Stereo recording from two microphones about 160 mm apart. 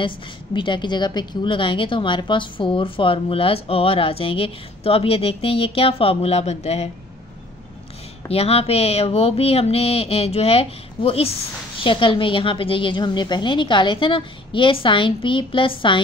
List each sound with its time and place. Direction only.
0.0 s a woman's voice: 30° left (ahead or behind)
8.3 s a woman's voice: 35° left (ahead or behind)